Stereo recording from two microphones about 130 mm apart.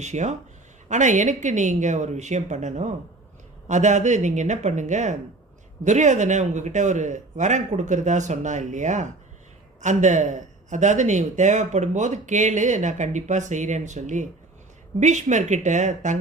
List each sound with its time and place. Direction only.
0.0 s speech: 65° right (ahead or behind)